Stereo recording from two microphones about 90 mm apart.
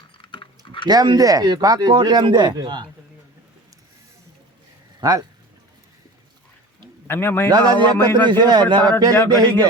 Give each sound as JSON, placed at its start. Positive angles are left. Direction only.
{"t": 0.2, "sound": "a sound", "side_deg": 70}
{"t": 0.9, "sound": "speech", "side_deg": -50}
{"t": 4.9, "sound": "speech", "side_deg": -45}
{"t": 7.1, "sound": "speech", "side_deg": 25}
{"t": 7.5, "sound": "speech", "side_deg": -50}